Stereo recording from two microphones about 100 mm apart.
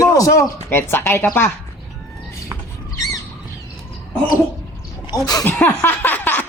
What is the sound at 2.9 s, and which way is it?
Squawk, 35° left (ahead or behind).